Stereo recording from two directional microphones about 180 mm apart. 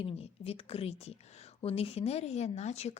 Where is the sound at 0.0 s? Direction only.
35° left (ahead or behind).